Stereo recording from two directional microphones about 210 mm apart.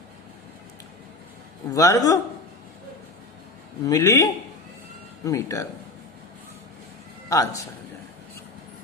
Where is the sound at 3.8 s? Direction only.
15° left (ahead or behind).